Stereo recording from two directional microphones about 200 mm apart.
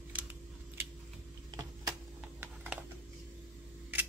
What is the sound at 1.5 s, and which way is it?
Typing, 20° right (ahead or behind).